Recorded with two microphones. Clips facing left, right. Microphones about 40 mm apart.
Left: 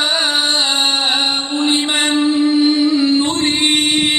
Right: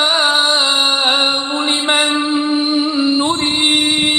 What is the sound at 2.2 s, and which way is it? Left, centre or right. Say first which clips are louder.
Music: left 3 dB; right.